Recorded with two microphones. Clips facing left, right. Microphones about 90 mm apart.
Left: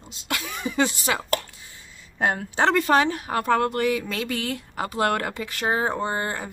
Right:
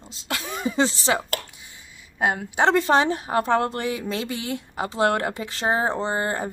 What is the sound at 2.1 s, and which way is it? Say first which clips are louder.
Speech: right 1 dB; 10° right (ahead or behind).